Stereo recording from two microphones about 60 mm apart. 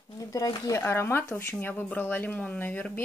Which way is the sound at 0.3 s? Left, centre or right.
Left.